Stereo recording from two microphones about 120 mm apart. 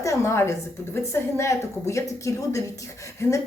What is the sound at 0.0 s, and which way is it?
A woman's voice, 25° left (ahead or behind).